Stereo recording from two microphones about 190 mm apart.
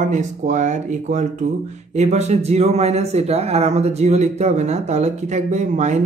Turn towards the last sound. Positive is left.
turn(degrees=-40)  # may be behind; listen again after turning